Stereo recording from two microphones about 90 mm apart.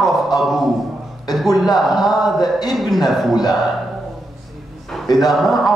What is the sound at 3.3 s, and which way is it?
Speech, 50° left (ahead or behind).